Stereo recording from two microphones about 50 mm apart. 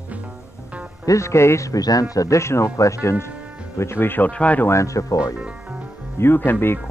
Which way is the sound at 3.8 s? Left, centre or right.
Left.